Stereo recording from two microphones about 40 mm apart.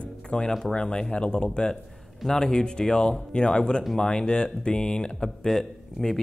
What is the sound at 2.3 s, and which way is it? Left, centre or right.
Speech, centre.